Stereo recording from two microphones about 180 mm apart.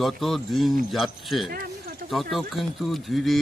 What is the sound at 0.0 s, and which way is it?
Speech, centre (ahead or behind).